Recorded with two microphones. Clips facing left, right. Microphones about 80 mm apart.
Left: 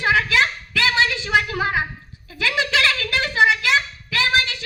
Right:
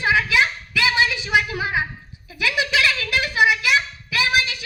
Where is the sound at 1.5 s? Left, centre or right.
Left.